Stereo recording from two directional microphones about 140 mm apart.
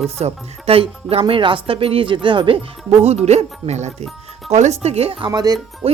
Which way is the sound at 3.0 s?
50° right (ahead or behind).